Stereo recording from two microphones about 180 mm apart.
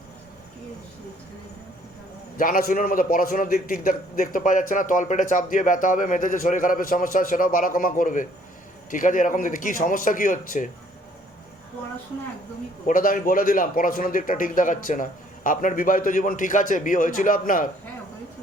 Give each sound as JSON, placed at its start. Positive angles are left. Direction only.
{"t": 2.4, "sound": "a man's voice", "side_deg": 50}
{"t": 12.9, "sound": "a man's voice", "side_deg": 50}